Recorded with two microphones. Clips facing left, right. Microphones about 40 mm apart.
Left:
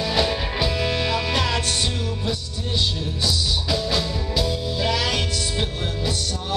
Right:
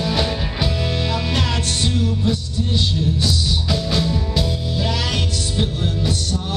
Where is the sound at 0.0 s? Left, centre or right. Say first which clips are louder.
Right 1 dB; centre.